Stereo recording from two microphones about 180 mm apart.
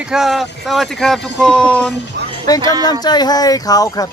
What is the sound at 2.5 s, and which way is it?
Speech, 20° left (ahead or behind).